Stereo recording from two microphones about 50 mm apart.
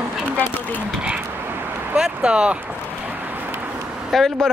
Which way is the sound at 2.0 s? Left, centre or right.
Centre.